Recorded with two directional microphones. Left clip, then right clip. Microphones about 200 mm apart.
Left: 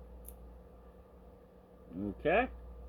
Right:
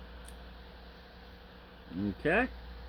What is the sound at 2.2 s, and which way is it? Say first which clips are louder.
Speech: right 1 dB; 25° right (ahead or behind).